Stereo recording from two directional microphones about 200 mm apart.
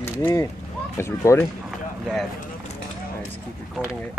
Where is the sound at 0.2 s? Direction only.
15° left (ahead or behind).